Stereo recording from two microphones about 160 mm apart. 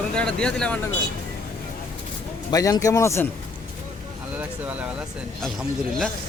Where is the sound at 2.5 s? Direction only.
20° left (ahead or behind).